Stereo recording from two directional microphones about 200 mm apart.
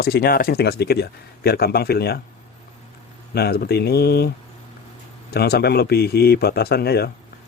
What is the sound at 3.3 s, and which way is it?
A man's voice, 55° left (ahead or behind).